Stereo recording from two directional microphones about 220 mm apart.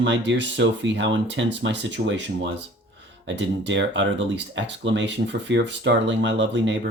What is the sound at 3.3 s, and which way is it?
Speech, 55° right (ahead or behind).